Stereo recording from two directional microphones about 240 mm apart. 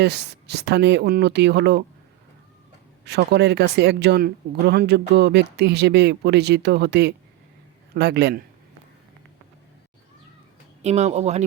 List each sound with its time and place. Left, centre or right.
0.0 s speech: right
3.0 s speech: right
10.8 s speech: right